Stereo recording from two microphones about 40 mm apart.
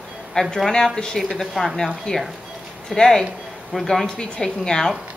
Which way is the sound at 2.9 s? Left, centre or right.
Centre.